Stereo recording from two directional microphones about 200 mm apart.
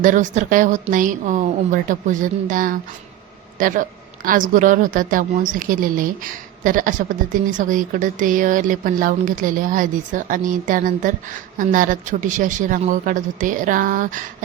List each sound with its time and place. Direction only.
0.0 s a woman's voice: 40° right (ahead or behind)